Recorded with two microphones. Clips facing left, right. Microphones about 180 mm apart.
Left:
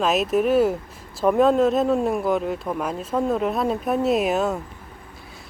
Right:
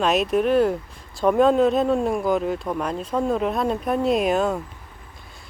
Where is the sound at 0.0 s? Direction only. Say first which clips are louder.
Even; centre (ahead or behind).